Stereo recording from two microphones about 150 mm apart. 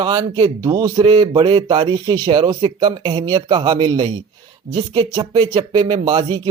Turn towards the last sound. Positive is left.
turn(degrees=-30)  # may be behind; listen again after turning